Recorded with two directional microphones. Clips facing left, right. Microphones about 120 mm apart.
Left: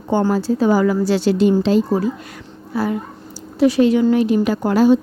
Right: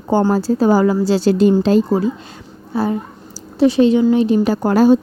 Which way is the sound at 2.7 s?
25° right (ahead or behind).